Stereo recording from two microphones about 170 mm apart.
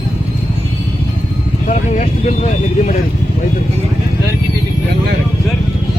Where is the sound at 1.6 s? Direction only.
45° left (ahead or behind).